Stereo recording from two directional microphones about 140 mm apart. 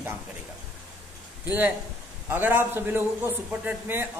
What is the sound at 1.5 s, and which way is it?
A man's voice, 10° right (ahead or behind).